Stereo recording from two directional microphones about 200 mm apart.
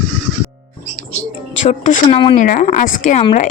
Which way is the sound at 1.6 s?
35° left (ahead or behind).